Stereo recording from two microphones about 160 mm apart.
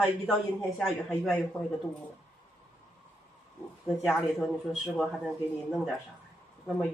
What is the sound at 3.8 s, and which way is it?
Speech, centre (ahead or behind).